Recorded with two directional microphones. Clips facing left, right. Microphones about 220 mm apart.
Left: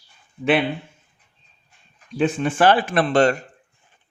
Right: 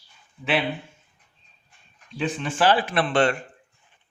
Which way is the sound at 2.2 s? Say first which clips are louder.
Left 5 dB; 50° left (ahead or behind).